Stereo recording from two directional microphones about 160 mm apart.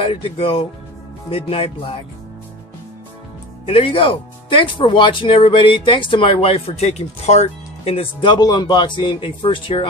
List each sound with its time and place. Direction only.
0.0 s speech: 35° left (ahead or behind)
3.6 s speech: 35° left (ahead or behind)